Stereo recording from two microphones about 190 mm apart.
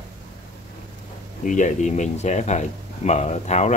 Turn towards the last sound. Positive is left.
turn(degrees=35)  # may be behind; listen again after turning